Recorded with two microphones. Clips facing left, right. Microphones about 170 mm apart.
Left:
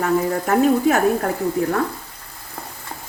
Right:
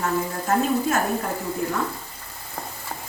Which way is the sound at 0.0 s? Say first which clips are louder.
Left 6 dB; 65° left (ahead or behind).